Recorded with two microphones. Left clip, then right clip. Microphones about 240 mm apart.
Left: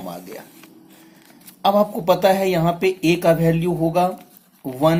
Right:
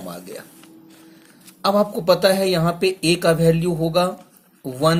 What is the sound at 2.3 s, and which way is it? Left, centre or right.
Speech, right.